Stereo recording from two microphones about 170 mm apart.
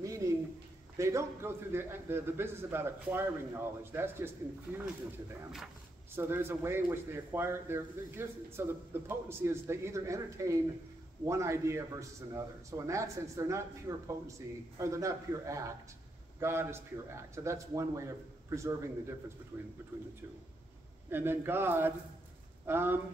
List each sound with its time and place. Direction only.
0.2 s a sound: 20° right (ahead or behind)
0.9 s speech: 15° right (ahead or behind)
6.1 s speech: 15° right (ahead or behind)
21.1 s speech: 10° right (ahead or behind)